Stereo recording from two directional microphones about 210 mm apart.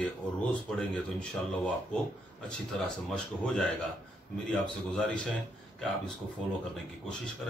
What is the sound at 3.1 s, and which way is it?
Speech, 5° left (ahead or behind).